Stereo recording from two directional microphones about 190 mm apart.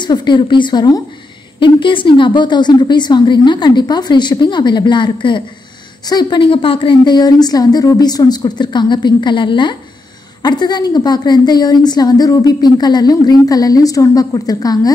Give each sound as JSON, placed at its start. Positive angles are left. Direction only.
{"t": 0.0, "sound": "a woman's voice", "side_deg": 25}